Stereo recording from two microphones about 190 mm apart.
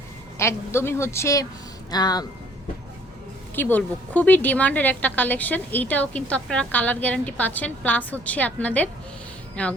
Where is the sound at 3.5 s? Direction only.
10° left (ahead or behind).